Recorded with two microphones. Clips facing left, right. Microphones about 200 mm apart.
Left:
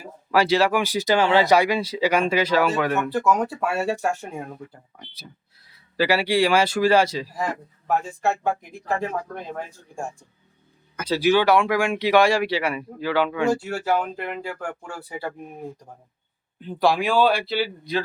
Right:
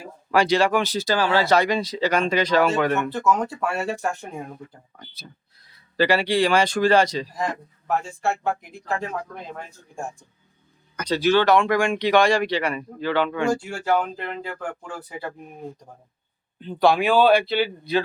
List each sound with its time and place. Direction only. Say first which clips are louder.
0.0 s speech: even; 5° left (ahead or behind)
8.2 s speech: left 1 dB; 15° left (ahead or behind)
10.9 s speech: even; 5° left (ahead or behind)
16.6 s speech: right 2 dB; 5° left (ahead or behind)